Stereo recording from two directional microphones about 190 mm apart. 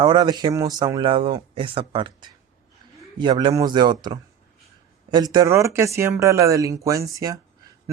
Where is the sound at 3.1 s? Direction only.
25° right (ahead or behind).